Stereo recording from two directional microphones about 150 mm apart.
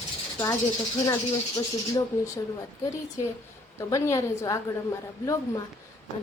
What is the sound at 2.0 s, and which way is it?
Speech, 25° left (ahead or behind).